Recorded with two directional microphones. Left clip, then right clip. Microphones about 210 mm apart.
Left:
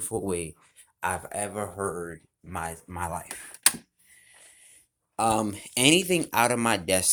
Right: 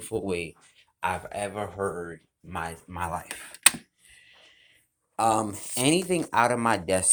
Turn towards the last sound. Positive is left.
turn(degrees=10)  # may be behind; listen again after turning